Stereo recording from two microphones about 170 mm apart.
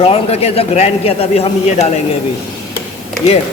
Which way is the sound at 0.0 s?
35° left (ahead or behind).